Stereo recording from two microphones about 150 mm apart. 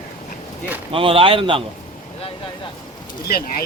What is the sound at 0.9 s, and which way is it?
Speech, 40° right (ahead or behind).